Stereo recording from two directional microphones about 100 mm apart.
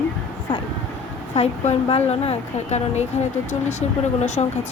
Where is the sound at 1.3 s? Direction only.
85° left.